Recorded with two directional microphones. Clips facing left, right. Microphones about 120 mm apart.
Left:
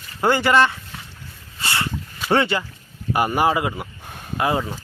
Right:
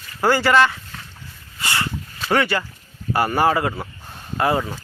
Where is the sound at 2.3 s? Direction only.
25° left (ahead or behind).